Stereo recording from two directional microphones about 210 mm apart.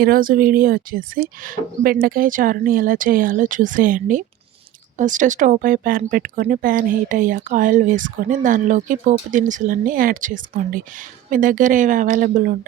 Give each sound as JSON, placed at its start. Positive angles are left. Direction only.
{"t": 0.0, "sound": "speech", "side_deg": -40}